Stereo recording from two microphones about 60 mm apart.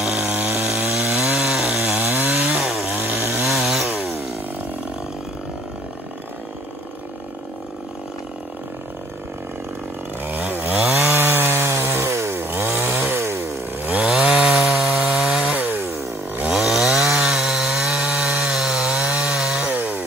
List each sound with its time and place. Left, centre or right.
0.0 s chainsaw: centre
0.3 s chainsaw: right
1.1 s chainsaw: centre
2.0 s chainsaw: right
2.6 s chainsaw: centre
3.0 s chainsaw: right
3.4 s chainsaw: centre
10.2 s chainsaw: right
13.8 s chainsaw: centre
15.6 s chainsaw: right
16.5 s chainsaw: centre; by 20.0 s right